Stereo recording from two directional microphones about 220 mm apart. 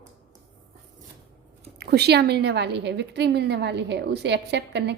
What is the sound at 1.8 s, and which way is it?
A woman's voice, 50° right (ahead or behind).